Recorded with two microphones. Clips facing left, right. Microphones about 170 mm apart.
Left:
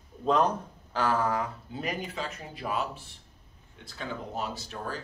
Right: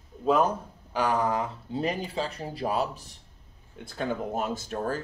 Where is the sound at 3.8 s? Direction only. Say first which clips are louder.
Right 7 dB; 50° right (ahead or behind).